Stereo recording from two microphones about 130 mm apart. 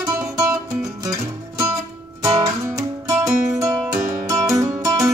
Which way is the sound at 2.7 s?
25° right (ahead or behind).